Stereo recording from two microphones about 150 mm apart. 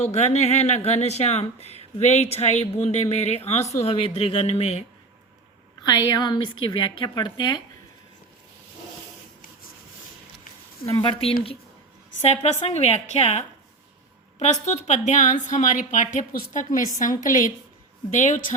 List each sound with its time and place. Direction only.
0.0 s speech: 50° left (ahead or behind)
5.8 s a woman's voice: 25° left (ahead or behind)
10.8 s a woman's voice: 35° left (ahead or behind)
12.2 s speech: 45° left (ahead or behind)
14.4 s a woman's voice: 50° left (ahead or behind)